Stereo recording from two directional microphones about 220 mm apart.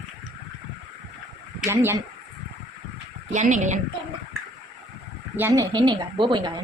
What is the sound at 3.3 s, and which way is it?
Speech, 35° right (ahead or behind).